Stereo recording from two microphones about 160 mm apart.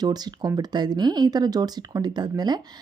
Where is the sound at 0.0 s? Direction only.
25° right (ahead or behind).